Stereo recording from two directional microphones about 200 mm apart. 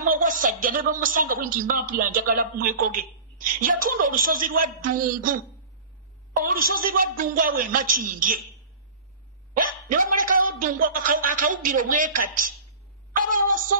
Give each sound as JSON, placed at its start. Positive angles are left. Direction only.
{"t": 0.0, "sound": "speech", "side_deg": -40}
{"t": 6.4, "sound": "speech", "side_deg": -45}
{"t": 9.5, "sound": "speech", "side_deg": -45}
{"t": 13.1, "sound": "a sound", "side_deg": -40}